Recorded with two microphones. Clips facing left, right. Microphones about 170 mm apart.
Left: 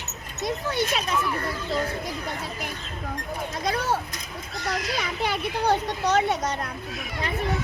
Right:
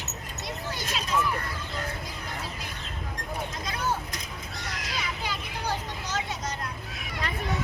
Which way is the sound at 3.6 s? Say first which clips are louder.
Left 7 dB; 70° left (ahead or behind).